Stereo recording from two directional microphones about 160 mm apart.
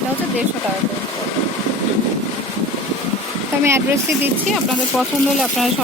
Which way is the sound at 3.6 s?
15° right (ahead or behind).